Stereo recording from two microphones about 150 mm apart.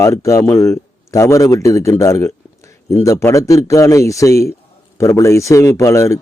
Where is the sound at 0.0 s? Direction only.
20° left (ahead or behind).